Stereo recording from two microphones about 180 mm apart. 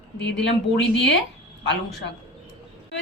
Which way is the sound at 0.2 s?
80° left.